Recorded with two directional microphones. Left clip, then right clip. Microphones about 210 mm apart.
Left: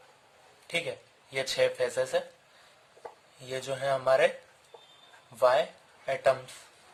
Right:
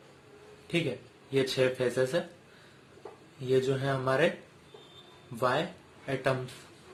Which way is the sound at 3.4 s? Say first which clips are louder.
Right 6 dB; 40° left (ahead or behind).